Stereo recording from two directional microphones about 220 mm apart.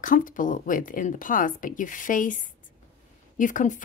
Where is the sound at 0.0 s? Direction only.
35° left (ahead or behind).